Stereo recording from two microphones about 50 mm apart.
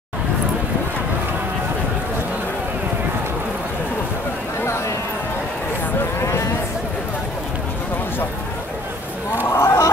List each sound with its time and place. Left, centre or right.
9.5 s chicken: left